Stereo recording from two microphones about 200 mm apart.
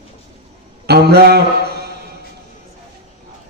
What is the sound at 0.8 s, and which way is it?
Speech, 55° right (ahead or behind).